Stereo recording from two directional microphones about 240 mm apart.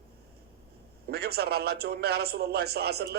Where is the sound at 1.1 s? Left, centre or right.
Right.